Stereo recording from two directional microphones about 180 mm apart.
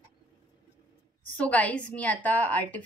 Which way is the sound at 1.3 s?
10° left (ahead or behind).